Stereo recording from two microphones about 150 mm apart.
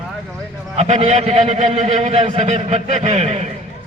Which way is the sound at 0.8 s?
50° right (ahead or behind).